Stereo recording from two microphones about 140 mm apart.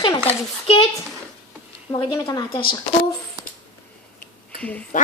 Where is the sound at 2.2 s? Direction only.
35° left (ahead or behind).